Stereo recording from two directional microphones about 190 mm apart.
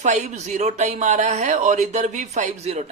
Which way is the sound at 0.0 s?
40° right (ahead or behind).